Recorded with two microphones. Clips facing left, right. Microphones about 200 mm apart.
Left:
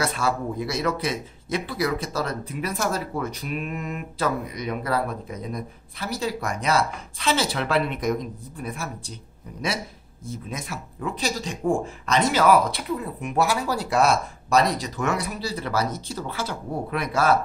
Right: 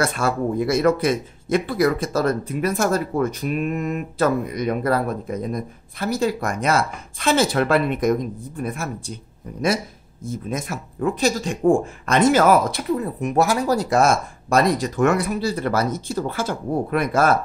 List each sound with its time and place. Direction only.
0.0 s speech: 50° right (ahead or behind)
10.2 s speech: 50° right (ahead or behind)